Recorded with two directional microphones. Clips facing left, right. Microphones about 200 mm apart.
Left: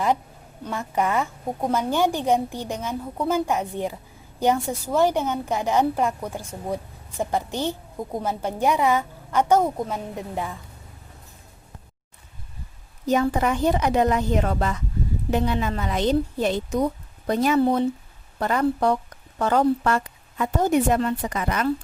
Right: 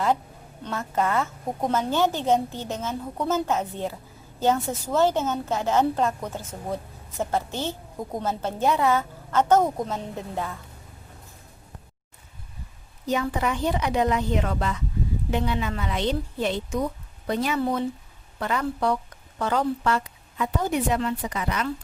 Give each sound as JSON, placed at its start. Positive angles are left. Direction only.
{"t": 0.6, "sound": "a woman's voice", "side_deg": 15}
{"t": 13.3, "sound": "a woman's voice", "side_deg": 45}
{"t": 17.6, "sound": "speech", "side_deg": 30}
{"t": 18.3, "sound": "a woman's voice", "side_deg": 45}